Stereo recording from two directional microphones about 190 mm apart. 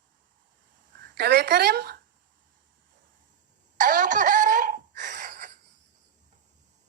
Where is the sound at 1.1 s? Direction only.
60° right (ahead or behind).